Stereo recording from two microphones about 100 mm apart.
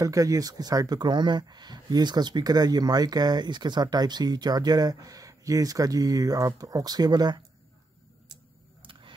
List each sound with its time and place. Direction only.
0.0 s speech: 35° right (ahead or behind)